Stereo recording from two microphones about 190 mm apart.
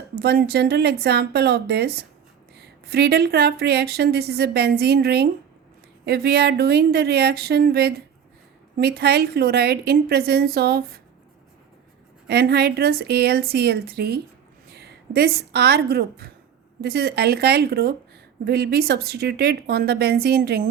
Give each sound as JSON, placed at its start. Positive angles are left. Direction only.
{"t": 0.2, "sound": "speech", "side_deg": -55}
{"t": 12.3, "sound": "a woman's voice", "side_deg": -55}